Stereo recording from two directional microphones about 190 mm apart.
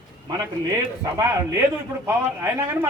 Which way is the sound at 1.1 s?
15° right (ahead or behind).